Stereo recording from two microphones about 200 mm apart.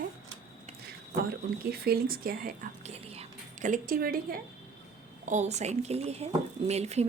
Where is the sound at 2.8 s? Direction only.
30° right (ahead or behind); by 4.4 s 45° right (ahead or behind).